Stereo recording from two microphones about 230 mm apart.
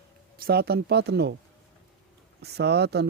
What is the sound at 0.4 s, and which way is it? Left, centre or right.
Speech, right.